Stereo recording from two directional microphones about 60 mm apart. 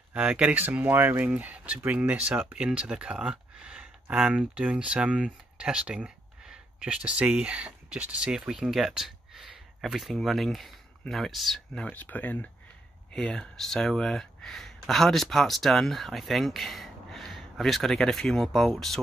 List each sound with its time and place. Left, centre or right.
0.1 s speech: right
8.3 s speech: centre
11.9 s speech: left
13.2 s speech: centre